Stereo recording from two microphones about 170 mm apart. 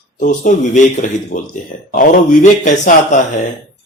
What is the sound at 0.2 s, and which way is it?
Speech, 50° left (ahead or behind).